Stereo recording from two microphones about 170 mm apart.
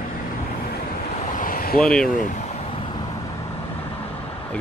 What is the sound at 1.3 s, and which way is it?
Vehicle, 55° left (ahead or behind).